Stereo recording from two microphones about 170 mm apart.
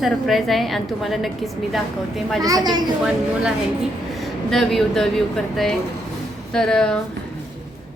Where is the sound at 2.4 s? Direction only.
20° right (ahead or behind).